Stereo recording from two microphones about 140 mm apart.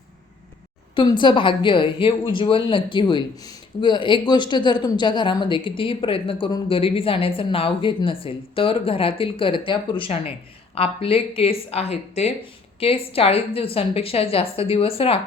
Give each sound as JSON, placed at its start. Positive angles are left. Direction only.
{"t": 0.9, "sound": "a woman's voice", "side_deg": 35}